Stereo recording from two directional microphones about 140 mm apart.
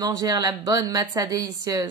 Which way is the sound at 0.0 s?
25° right (ahead or behind).